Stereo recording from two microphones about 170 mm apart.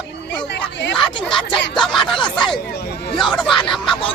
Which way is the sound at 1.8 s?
Centre (ahead or behind).